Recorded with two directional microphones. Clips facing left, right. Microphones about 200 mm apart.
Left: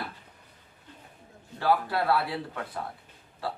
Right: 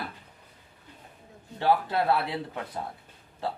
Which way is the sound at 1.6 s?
20° right (ahead or behind).